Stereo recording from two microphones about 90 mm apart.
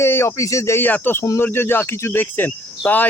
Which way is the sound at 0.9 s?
20° left (ahead or behind).